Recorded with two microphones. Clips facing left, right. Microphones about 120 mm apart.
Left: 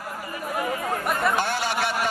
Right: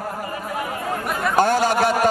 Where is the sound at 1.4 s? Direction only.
45° right (ahead or behind).